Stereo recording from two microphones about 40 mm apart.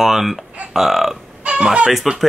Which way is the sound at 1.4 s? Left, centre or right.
Right.